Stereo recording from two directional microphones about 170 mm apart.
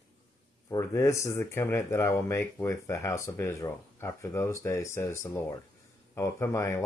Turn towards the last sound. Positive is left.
turn(degrees=15)  # may be behind; listen again after turning